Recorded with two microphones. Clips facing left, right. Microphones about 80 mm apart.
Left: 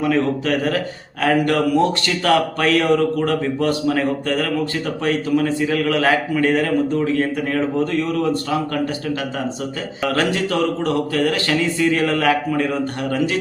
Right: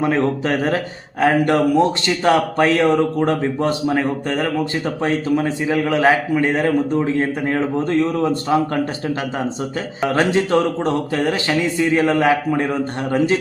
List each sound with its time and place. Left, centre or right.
0.0 s a man's voice: right
10.0 s speech: right